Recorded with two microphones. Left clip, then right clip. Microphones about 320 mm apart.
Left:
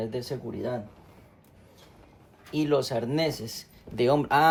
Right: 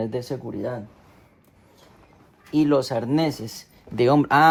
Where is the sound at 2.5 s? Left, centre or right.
Right.